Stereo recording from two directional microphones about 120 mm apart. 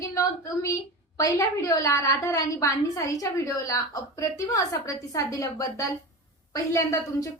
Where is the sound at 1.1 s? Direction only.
30° left (ahead or behind).